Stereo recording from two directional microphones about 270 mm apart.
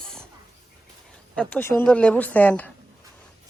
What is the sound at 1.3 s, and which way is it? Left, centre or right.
Speech, centre.